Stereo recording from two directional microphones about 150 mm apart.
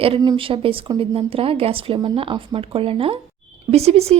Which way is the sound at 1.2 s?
40° right (ahead or behind).